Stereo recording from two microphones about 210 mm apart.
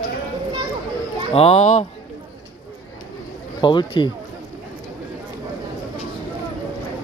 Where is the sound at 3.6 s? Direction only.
20° left (ahead or behind).